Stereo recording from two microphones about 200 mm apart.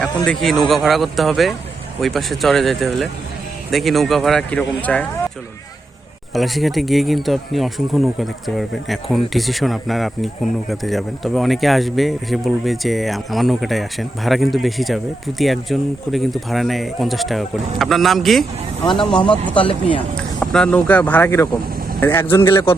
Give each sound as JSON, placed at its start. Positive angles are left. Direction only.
{"t": 0.3, "sound": "speech", "side_deg": 0}
{"t": 6.3, "sound": "speech", "side_deg": 0}
{"t": 19.1, "sound": "speech", "side_deg": 25}
{"t": 20.4, "sound": "speech", "side_deg": 5}